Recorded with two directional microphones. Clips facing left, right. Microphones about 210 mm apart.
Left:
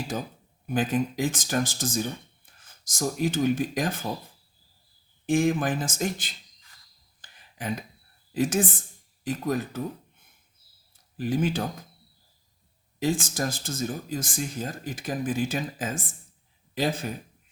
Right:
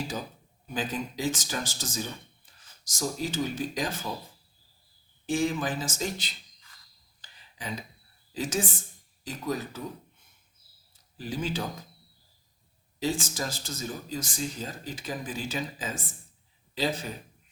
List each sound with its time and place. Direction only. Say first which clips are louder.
0.7 s speech: left 7 dB; 55° left (ahead or behind)
5.2 s speech: left 4 dB; 55° left (ahead or behind)
7.2 s a sound: left 5 dB; 55° left (ahead or behind)
8.3 s a woman's voice: left 6 dB; 55° left (ahead or behind)
11.2 s speech: left 6 dB; 55° left (ahead or behind)
13.0 s speech: left 4 dB; 55° left (ahead or behind)